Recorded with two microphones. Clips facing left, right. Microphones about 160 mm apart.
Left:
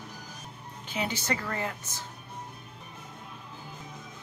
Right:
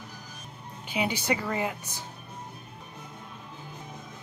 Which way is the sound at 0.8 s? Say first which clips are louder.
Right 3 dB; 10° right (ahead or behind).